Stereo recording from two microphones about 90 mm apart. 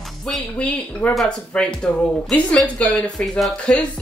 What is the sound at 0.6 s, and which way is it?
Speech, 15° left (ahead or behind).